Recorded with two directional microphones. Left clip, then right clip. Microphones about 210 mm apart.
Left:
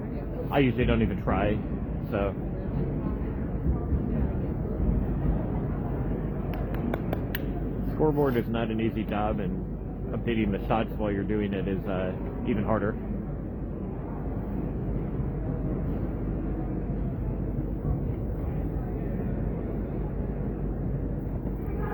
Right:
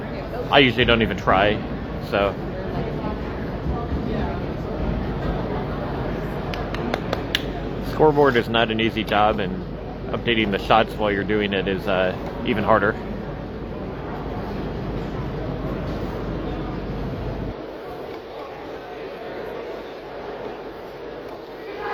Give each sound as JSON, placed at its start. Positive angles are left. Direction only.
{"t": 0.5, "sound": "speech", "side_deg": -10}
{"t": 6.9, "sound": "finger snapping", "side_deg": 60}
{"t": 8.0, "sound": "speech", "side_deg": -15}